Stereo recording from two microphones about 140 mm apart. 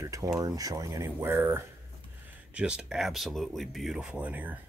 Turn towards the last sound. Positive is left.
turn(degrees=-10)  # may be behind; listen again after turning